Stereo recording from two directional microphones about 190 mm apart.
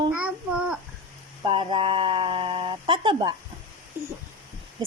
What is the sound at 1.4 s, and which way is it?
Speech, 25° right (ahead or behind).